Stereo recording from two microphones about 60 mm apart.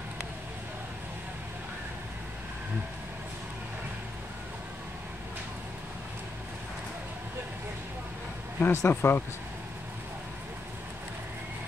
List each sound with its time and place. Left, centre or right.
8.5 s speech: left